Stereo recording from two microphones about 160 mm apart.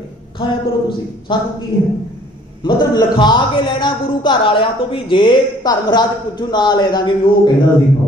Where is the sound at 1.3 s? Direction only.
30° left (ahead or behind).